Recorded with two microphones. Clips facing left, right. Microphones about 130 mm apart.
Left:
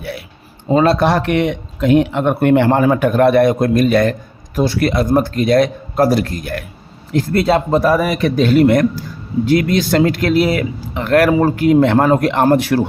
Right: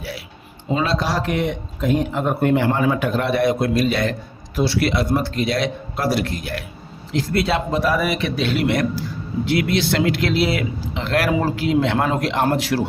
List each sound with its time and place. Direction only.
0.7 s speech: 50° left (ahead or behind)